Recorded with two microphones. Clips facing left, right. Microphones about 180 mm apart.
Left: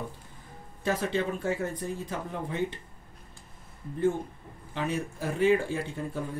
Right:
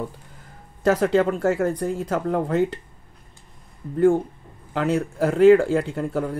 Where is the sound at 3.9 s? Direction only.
80° right.